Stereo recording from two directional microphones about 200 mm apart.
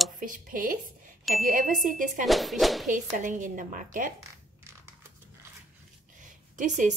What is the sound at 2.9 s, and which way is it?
A woman's voice, 40° right (ahead or behind).